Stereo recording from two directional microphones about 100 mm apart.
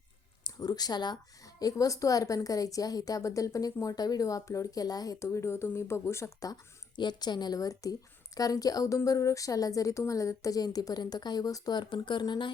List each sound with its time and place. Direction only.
0.4 s a woman's voice: 40° left (ahead or behind)